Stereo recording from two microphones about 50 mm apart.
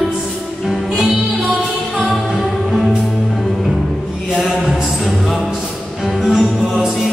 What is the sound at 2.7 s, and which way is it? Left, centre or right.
Music, centre.